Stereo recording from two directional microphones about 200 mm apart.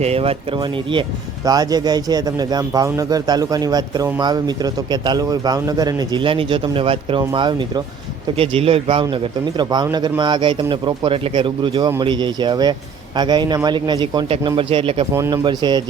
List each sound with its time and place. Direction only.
0.0 s speech: 30° right (ahead or behind)
15.1 s speech: 15° right (ahead or behind)